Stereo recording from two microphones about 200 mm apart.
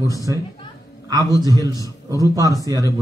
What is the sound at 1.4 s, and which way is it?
A man's voice, 20° right (ahead or behind).